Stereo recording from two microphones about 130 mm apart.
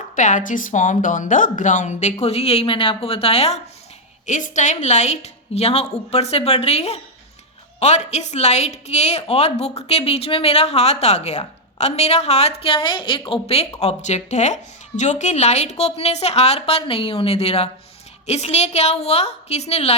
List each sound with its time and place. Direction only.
0.2 s a woman's voice: 75° left (ahead or behind); by 3.6 s 50° left (ahead or behind)
4.3 s a woman's voice: 75° left (ahead or behind); by 20.0 s 55° left (ahead or behind)